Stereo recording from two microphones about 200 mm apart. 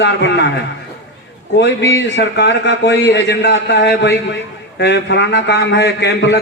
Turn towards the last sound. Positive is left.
turn(degrees=60)  # may be behind; listen again after turning